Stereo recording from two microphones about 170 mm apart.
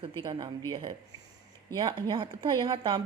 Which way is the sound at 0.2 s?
25° right (ahead or behind).